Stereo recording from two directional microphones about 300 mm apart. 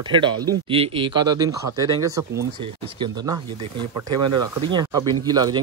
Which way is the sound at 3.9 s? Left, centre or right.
Right.